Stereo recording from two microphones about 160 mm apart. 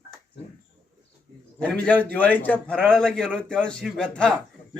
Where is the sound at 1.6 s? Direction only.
10° left (ahead or behind).